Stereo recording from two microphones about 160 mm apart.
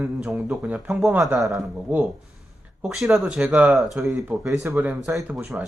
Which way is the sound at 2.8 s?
Centre (ahead or behind).